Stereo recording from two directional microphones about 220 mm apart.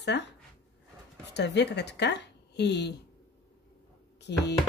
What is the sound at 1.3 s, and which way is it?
A woman's voice, 50° left (ahead or behind).